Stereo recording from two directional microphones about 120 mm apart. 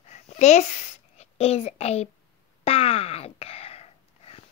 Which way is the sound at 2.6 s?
55° left (ahead or behind).